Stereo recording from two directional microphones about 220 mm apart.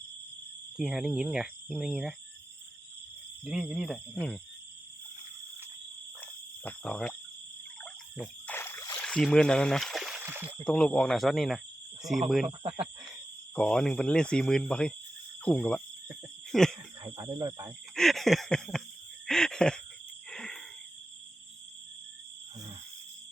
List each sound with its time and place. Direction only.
0.8 s speech: centre (ahead or behind)
3.4 s speech: centre (ahead or behind)
6.7 s speech: 5° left (ahead or behind)
8.1 s a sound: 5° left (ahead or behind)
9.0 s speech: 5° left (ahead or behind)
10.6 s speech: 5° left (ahead or behind)
13.6 s speech: 5° left (ahead or behind)
15.4 s cricket: 5° left (ahead or behind)
17.0 s speech: 15° right (ahead or behind)
17.9 s a sound: centre (ahead or behind)
20.3 s wheeze: 5° left (ahead or behind)